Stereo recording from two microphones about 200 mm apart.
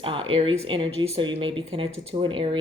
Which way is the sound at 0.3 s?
25° right (ahead or behind).